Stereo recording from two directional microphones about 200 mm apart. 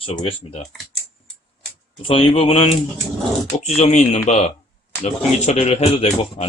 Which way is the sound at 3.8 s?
35° left (ahead or behind).